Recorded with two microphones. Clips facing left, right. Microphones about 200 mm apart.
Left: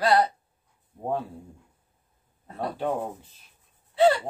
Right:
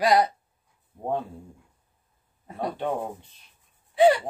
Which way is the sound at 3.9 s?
15° right (ahead or behind).